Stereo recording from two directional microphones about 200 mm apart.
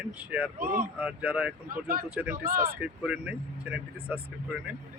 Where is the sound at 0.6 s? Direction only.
45° right (ahead or behind).